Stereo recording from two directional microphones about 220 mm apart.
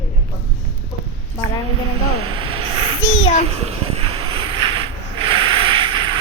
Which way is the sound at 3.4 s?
25° right (ahead or behind).